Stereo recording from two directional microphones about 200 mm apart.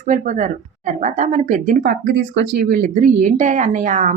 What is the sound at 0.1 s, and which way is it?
Speech, 40° right (ahead or behind).